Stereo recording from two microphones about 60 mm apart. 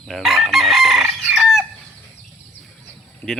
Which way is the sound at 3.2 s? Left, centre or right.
Left.